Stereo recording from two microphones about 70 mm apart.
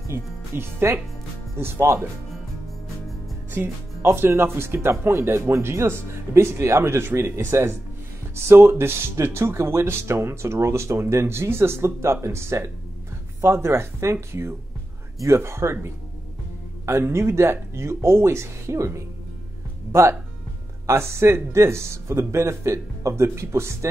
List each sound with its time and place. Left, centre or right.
0.1 s speech: right
4.0 s speech: right
15.1 s speech: right